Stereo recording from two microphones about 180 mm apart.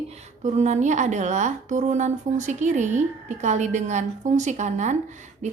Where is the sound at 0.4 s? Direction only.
40° right (ahead or behind).